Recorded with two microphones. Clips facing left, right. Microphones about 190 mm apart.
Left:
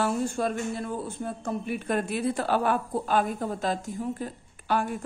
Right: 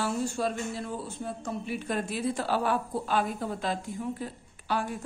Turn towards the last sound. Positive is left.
turn(degrees=50)  # may be behind; listen again after turning